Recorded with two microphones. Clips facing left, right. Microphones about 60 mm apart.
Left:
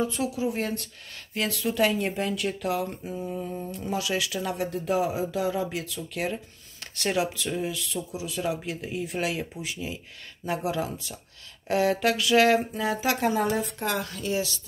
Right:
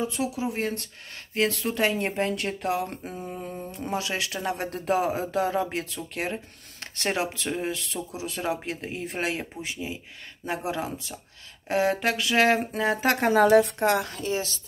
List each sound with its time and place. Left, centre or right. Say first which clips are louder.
0.0 s speech: left 1 dB; right
4.6 s speech: right 2 dB; right
12.7 s speech: right 3 dB; right
13.4 s a woman's voice: right 8 dB; right
14.1 s speech: even; right